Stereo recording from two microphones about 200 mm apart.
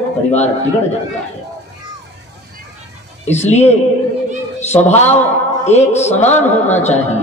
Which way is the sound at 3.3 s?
35° left (ahead or behind).